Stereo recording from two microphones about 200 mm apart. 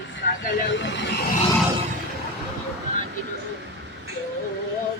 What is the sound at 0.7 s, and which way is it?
Vehicle, 60° left (ahead or behind).